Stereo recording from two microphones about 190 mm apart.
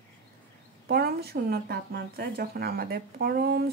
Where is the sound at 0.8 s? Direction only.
55° right (ahead or behind).